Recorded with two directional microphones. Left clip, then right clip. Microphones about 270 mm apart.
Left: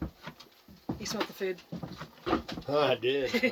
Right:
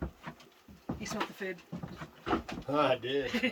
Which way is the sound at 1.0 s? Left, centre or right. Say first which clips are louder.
Left 4 dB; centre.